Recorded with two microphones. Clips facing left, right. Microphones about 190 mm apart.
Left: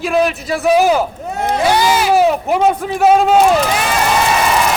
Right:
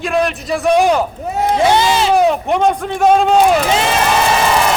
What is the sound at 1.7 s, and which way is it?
Speech, 25° right (ahead or behind).